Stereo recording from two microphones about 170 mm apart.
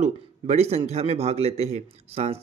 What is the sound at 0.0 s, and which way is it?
A man's voice, 40° right (ahead or behind).